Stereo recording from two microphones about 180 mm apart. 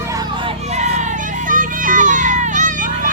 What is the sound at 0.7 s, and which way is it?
Children playing, 40° right (ahead or behind).